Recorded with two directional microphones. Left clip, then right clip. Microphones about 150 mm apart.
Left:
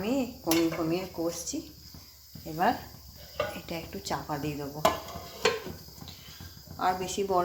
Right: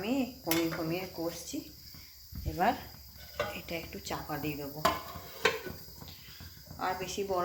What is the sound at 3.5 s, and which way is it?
Speech, 10° left (ahead or behind).